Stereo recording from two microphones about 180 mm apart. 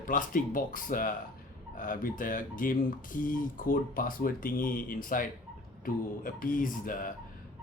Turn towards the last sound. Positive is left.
turn(degrees=50)  # may be behind; listen again after turning